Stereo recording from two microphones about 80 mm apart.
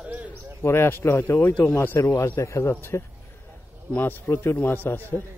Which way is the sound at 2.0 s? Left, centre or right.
Left.